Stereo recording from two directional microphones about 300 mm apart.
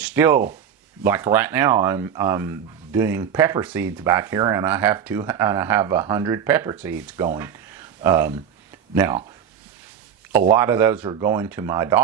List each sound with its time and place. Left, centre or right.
0.0 s a sound: centre
1.0 s speech: centre
10.3 s speech: centre